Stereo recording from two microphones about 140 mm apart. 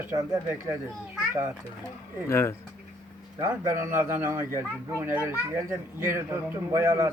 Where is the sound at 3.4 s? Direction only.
20° right (ahead or behind).